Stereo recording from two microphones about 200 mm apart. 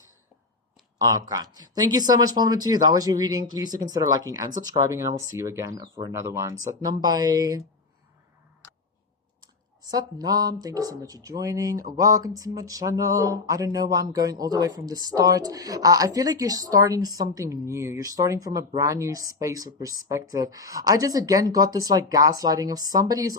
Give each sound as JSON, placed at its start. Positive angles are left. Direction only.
{"t": 0.9, "sound": "speech", "side_deg": -20}
{"t": 9.8, "sound": "speech", "side_deg": -20}